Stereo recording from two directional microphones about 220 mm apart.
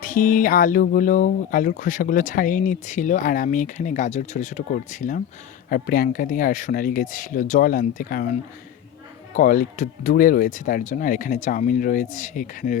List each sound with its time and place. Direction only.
0.0 s speech: 40° left (ahead or behind)